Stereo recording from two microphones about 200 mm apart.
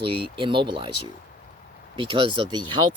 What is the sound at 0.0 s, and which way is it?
Speech, 25° right (ahead or behind).